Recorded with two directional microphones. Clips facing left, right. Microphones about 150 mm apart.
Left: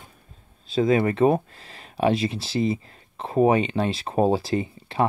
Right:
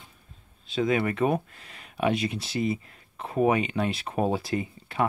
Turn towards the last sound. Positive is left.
turn(degrees=30)  # may be behind; listen again after turning